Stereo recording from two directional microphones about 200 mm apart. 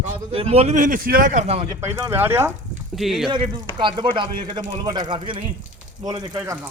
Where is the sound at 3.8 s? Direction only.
25° right (ahead or behind).